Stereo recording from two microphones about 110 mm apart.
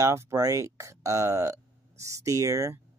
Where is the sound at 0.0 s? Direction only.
25° right (ahead or behind).